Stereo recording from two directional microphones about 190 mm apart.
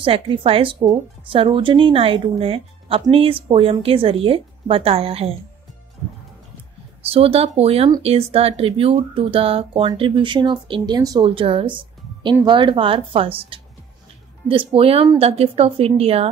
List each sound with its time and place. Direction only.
0.0 s speech: 30° right (ahead or behind)
7.1 s speech: 30° right (ahead or behind)